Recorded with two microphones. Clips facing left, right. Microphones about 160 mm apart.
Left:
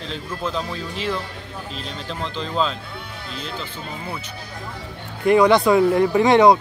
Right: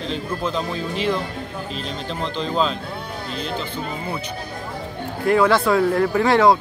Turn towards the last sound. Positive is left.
turn(degrees=20)  # may be behind; listen again after turning